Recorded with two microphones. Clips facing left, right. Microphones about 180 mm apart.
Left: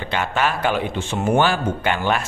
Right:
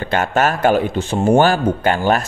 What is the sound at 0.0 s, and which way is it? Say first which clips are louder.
Speech: right 5 dB; 45° right (ahead or behind).